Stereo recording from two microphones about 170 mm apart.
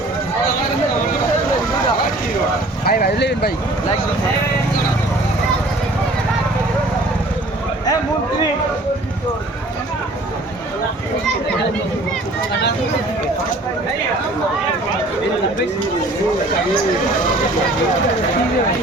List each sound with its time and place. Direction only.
2.8 s speech: 65° left (ahead or behind)